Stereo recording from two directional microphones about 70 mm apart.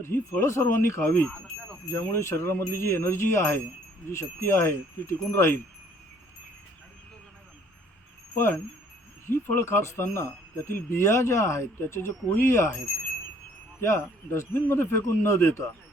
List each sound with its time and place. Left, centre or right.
0.0 s speech: left
1.1 s speech: left
1.9 s speech: left
8.4 s speech: left
13.8 s speech: left